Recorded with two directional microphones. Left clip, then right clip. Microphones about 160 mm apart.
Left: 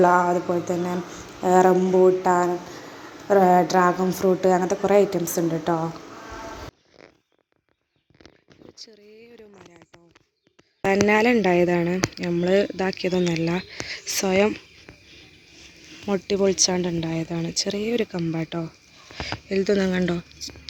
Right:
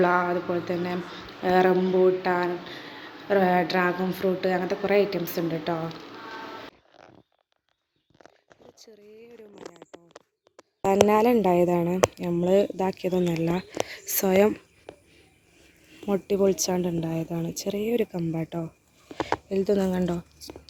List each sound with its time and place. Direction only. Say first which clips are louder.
0.0 s speech: left 5 dB; centre (ahead or behind)
0.3 s a woman's voice: left 4 dB; 15° left (ahead or behind)
3.3 s a woman's voice: left 5 dB; 15° left (ahead or behind)
11.0 s speech: even; centre (ahead or behind); by 14.6 s 15° right (ahead or behind)
16.0 s speech: left 1 dB; 5° right (ahead or behind)